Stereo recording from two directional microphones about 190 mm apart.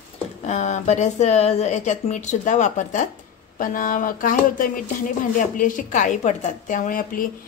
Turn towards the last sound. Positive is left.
turn(degrees=45)  # may be behind; listen again after turning